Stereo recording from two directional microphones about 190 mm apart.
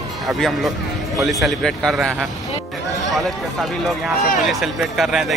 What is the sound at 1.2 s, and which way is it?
Speech, centre (ahead or behind).